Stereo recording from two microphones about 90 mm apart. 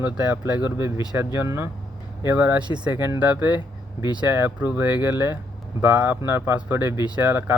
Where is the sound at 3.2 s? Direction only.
20° right (ahead or behind).